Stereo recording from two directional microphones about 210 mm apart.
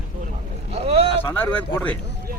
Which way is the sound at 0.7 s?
30° right (ahead or behind).